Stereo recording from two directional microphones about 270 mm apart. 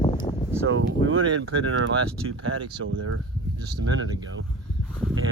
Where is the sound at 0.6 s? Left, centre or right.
Right.